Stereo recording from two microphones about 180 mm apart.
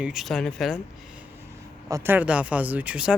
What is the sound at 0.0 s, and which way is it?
Speech, centre (ahead or behind).